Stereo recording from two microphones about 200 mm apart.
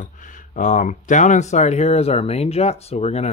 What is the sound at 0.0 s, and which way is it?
Speech, 40° left (ahead or behind).